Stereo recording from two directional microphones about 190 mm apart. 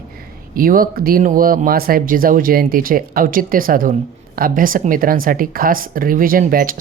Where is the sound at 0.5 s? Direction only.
50° right (ahead or behind).